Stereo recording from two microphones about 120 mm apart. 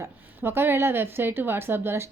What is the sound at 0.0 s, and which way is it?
A woman's voice, 20° right (ahead or behind).